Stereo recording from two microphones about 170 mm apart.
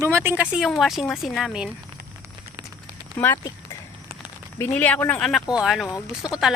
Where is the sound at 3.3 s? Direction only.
20° left (ahead or behind).